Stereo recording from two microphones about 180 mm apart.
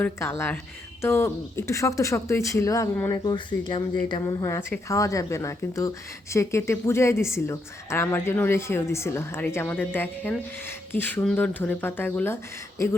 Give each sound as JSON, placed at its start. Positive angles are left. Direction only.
{"t": 0.0, "sound": "a woman's voice", "side_deg": 15}